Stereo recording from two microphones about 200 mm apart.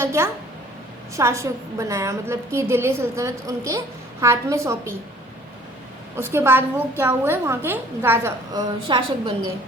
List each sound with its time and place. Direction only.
0.0 s a woman's voice: 10° right (ahead or behind)
6.1 s a woman's voice: 10° right (ahead or behind)
8.9 s a woman's voice: 25° right (ahead or behind)